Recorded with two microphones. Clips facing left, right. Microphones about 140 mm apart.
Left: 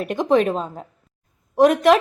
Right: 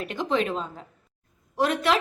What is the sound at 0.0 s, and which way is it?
Speech, 50° left (ahead or behind).